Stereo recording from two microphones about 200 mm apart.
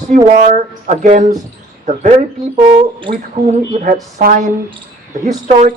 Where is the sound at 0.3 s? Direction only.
40° right (ahead or behind).